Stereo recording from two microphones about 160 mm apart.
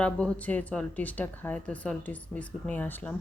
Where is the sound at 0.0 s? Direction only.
5° left (ahead or behind).